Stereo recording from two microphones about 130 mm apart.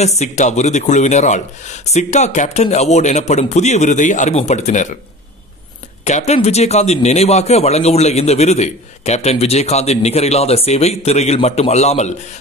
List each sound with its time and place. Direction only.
0.0 s a man's voice: 60° left (ahead or behind)
6.0 s a man's voice: 60° left (ahead or behind)